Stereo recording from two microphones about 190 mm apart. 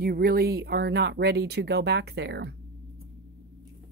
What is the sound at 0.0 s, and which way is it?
Speech, 55° right (ahead or behind).